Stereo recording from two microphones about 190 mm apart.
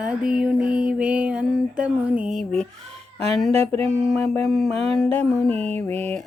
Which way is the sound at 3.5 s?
30° right (ahead or behind).